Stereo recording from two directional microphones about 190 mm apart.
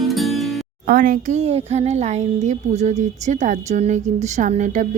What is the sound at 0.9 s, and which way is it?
Speech, 45° right (ahead or behind).